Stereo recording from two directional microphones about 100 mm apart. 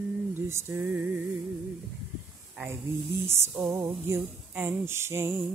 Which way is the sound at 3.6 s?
20° right (ahead or behind).